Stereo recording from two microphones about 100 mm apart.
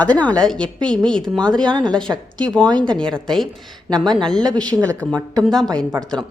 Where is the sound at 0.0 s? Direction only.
15° left (ahead or behind).